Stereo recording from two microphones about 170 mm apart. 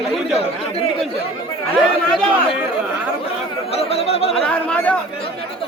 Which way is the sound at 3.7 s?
35° left (ahead or behind).